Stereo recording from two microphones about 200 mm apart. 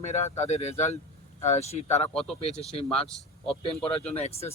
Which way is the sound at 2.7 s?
30° left (ahead or behind).